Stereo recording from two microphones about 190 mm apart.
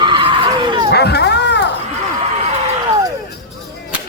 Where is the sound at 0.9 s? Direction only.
60° left (ahead or behind).